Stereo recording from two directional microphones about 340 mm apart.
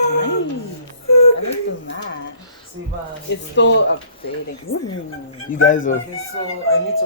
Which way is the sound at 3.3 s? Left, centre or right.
Left.